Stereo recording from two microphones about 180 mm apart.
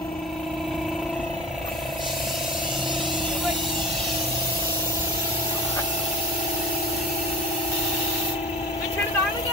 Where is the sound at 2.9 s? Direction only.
Centre (ahead or behind).